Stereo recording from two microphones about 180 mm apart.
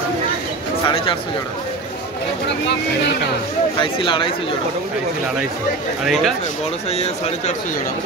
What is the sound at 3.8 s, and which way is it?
Speech, 30° left (ahead or behind).